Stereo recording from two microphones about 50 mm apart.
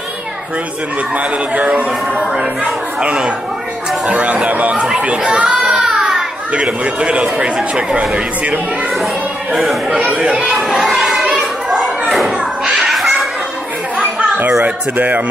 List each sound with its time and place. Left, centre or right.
1.1 s speech: right
4.7 s speech: centre
5.0 s children playing: centre
6.5 s speech: right
9.8 s speech: right
10.2 s speech: centre
10.8 s children playing: centre
12.7 s children playing: centre
14.6 s speech: right